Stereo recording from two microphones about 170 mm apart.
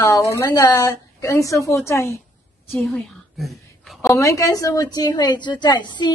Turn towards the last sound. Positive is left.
turn(degrees=25)  # may be behind; listen again after turning